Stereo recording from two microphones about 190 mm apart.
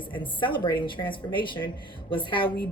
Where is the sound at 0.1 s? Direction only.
25° left (ahead or behind).